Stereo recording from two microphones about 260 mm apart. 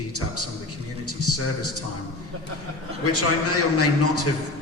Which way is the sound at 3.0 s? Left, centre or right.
Left.